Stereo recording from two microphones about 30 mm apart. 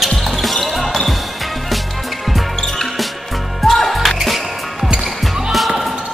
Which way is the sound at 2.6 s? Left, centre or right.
Centre.